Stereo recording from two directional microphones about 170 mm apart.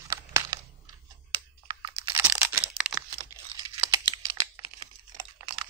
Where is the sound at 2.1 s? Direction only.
15° right (ahead or behind).